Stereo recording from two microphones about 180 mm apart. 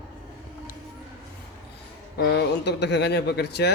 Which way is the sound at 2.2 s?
65° left (ahead or behind).